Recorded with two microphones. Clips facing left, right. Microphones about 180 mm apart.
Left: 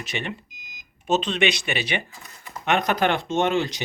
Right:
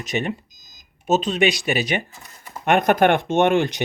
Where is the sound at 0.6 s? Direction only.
40° right (ahead or behind).